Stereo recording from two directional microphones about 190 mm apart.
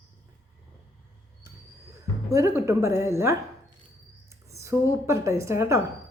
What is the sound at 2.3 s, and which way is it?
A woman's voice, 15° right (ahead or behind).